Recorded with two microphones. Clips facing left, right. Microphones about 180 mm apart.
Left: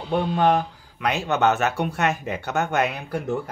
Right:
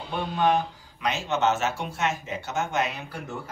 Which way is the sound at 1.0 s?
60° left (ahead or behind).